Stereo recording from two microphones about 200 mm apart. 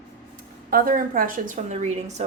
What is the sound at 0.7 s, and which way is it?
A woman's voice, 45° right (ahead or behind).